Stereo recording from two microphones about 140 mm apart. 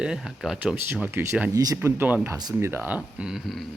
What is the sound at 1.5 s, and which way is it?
Speech, 25° right (ahead or behind).